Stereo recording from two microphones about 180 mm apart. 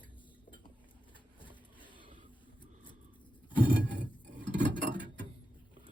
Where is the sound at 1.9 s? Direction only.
25° right (ahead or behind).